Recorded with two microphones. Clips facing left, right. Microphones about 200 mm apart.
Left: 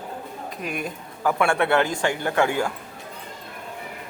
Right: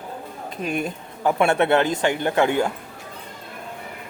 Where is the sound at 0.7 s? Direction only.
25° right (ahead or behind).